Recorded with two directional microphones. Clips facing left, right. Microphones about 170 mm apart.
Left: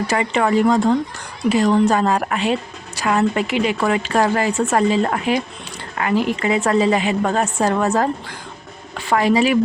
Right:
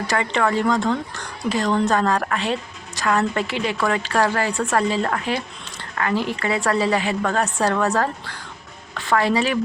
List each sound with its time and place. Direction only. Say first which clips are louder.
0.1 s a woman's voice: left 2 dB; 20° left (ahead or behind)